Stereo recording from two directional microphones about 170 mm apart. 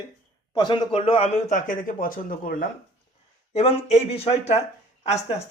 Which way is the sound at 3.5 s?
35° left (ahead or behind).